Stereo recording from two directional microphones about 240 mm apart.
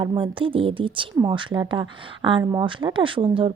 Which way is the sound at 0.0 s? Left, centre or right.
Centre.